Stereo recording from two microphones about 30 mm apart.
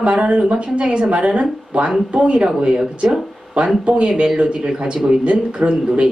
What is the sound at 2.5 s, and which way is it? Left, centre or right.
Speech, right.